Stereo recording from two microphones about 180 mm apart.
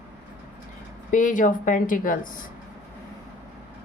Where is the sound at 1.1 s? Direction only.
45° left (ahead or behind).